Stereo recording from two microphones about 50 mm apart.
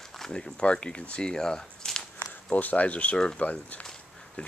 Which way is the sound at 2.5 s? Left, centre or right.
Left.